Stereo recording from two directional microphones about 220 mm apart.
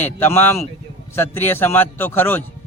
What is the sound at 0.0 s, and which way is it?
A man's voice, 10° left (ahead or behind).